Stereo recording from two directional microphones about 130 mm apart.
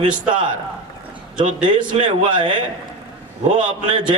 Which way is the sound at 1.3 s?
40° right (ahead or behind).